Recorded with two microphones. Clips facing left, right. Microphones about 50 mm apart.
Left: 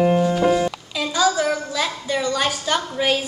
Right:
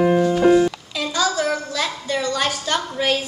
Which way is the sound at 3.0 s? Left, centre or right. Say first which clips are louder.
Even; centre.